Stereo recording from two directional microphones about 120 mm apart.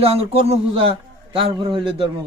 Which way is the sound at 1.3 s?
45° right (ahead or behind).